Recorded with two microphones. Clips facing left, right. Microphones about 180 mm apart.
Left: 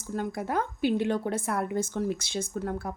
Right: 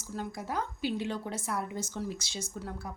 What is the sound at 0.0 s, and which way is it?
A woman's voice, 55° left (ahead or behind).